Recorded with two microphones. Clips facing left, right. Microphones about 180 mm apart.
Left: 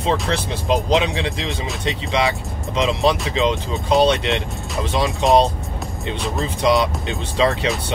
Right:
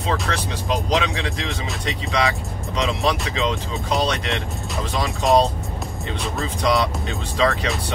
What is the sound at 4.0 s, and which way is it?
Speech, 25° left (ahead or behind).